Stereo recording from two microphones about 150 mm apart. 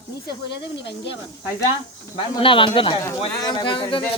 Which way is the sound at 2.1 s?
35° left (ahead or behind).